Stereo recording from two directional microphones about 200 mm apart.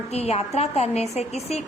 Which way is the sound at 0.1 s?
30° left (ahead or behind).